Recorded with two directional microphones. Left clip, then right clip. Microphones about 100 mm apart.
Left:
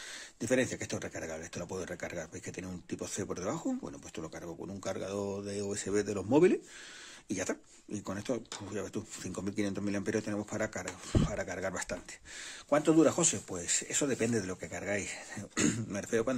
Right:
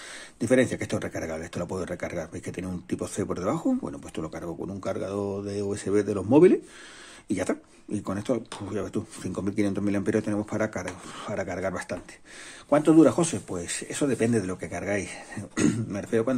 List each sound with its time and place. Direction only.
0.4 s speech: centre (ahead or behind)
4.7 s speech: 15° left (ahead or behind)
11.7 s speech: 15° left (ahead or behind)